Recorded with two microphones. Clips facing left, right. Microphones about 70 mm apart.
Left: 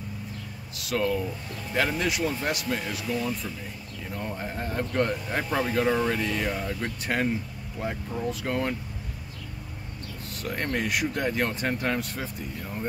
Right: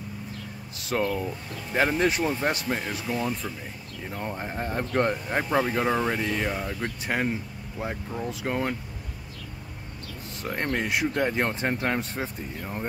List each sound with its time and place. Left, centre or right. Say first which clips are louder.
0.7 s a sound: even; right
1.8 s speech: right 3 dB; right
5.4 s speech: right 1 dB; centre
10.4 s speech: right 1 dB; right